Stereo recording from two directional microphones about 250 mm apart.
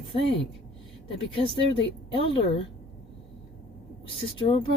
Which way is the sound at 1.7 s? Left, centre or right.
Left.